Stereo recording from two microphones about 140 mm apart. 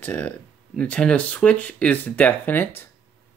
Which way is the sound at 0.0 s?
15° left (ahead or behind).